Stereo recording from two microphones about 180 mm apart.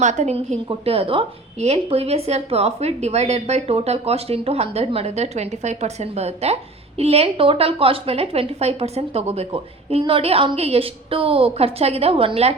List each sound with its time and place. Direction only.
0.0 s a woman's voice: 40° right (ahead or behind)